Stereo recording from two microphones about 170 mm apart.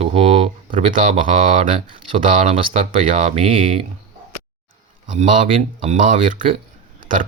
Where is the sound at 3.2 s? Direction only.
35° right (ahead or behind).